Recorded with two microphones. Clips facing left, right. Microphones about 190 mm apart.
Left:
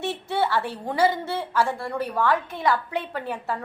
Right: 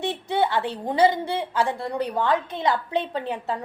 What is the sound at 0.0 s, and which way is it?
A woman's voice, 15° right (ahead or behind).